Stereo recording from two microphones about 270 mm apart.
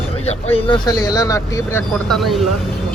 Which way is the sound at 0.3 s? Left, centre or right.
Left.